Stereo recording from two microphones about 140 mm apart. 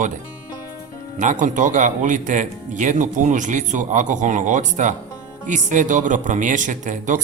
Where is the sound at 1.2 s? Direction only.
65° right (ahead or behind).